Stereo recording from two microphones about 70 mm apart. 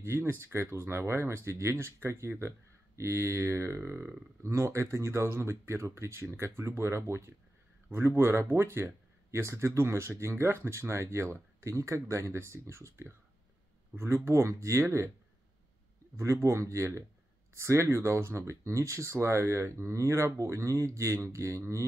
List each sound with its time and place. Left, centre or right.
0.0 s speech: right
16.2 s speech: right